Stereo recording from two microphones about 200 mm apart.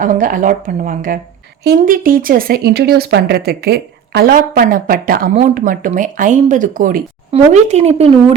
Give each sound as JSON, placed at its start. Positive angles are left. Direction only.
{"t": 0.0, "sound": "speech", "side_deg": -40}
{"t": 7.3, "sound": "speech", "side_deg": -30}